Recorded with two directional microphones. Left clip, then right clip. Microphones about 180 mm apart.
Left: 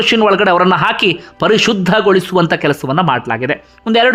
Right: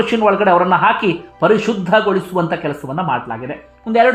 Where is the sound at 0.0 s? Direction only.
30° left (ahead or behind).